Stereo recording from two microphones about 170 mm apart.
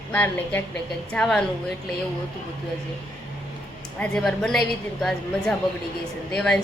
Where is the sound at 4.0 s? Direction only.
5° left (ahead or behind).